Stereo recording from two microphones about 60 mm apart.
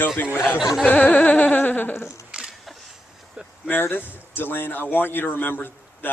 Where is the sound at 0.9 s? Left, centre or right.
Left.